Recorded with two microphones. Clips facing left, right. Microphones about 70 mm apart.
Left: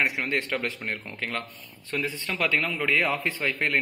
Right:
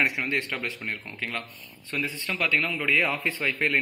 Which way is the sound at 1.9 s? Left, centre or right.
Left.